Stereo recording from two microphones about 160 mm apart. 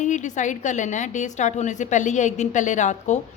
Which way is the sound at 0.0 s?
50° left (ahead or behind).